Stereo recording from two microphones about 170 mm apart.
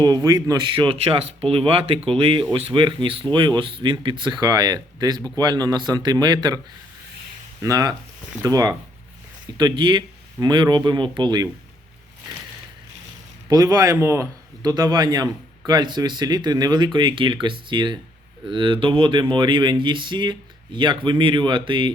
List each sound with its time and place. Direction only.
0.0 s speech: 20° right (ahead or behind)
7.6 s speech: 20° right (ahead or behind)
13.5 s speech: 20° right (ahead or behind)